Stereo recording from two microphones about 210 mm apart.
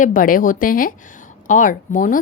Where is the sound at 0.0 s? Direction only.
40° left (ahead or behind).